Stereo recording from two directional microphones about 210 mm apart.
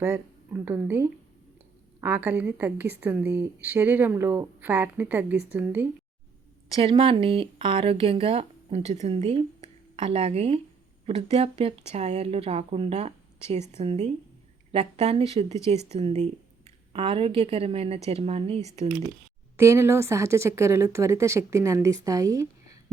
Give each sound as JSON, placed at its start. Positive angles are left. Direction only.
{"t": 0.0, "sound": "a woman's voice", "side_deg": -10}
{"t": 6.7, "sound": "speech", "side_deg": -25}
{"t": 19.5, "sound": "a woman's voice", "side_deg": -15}